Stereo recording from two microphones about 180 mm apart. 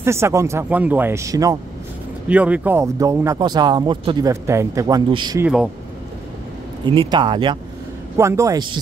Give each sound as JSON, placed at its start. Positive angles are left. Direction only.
{"t": 0.0, "sound": "speech", "side_deg": -15}
{"t": 2.2, "sound": "speech", "side_deg": -10}
{"t": 5.4, "sound": "speech", "side_deg": -5}
{"t": 6.9, "sound": "speech", "side_deg": -25}